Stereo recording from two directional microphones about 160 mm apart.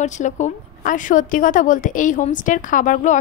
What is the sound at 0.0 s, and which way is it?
A woman's voice, 50° left (ahead or behind).